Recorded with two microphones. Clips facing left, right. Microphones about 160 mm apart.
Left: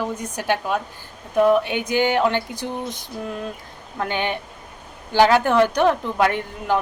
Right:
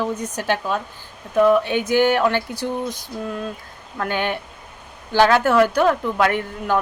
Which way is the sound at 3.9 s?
20° left (ahead or behind).